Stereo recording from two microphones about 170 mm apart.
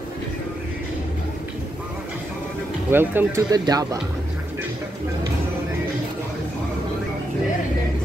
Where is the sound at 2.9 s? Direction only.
15° right (ahead or behind).